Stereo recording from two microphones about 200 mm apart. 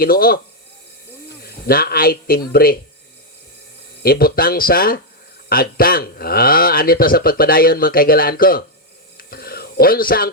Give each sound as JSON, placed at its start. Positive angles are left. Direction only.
{"t": 0.0, "sound": "speech", "side_deg": 45}
{"t": 1.4, "sound": "speech", "side_deg": 50}
{"t": 4.0, "sound": "speech", "side_deg": 45}
{"t": 9.1, "sound": "a sound", "side_deg": 50}